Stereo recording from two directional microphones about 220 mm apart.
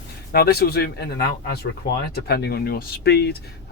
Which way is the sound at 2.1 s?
45° left (ahead or behind).